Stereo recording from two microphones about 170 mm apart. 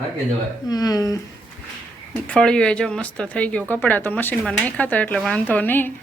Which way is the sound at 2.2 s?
5° left (ahead or behind).